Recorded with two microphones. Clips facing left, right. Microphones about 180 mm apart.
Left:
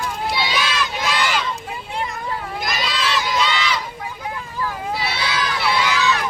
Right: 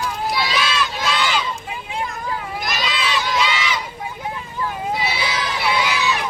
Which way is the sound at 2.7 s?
5° right (ahead or behind).